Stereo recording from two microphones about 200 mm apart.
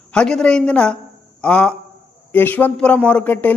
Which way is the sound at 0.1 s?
5° left (ahead or behind).